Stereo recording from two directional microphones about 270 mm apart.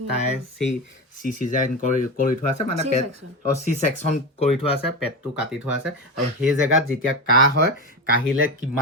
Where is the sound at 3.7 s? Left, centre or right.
Left.